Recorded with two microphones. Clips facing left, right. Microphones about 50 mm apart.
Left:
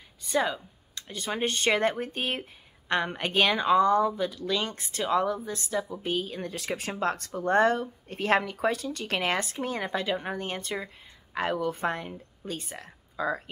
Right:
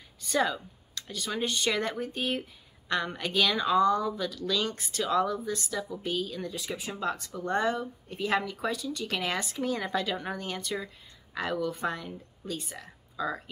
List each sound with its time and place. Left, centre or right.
0.3 s speech: left
6.8 s speech: left